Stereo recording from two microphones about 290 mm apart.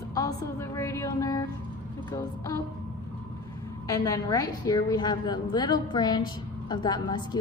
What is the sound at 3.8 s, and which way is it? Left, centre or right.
A woman's voice, centre.